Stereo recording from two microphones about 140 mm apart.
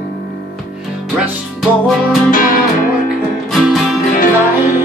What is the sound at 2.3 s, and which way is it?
Music, 90° left.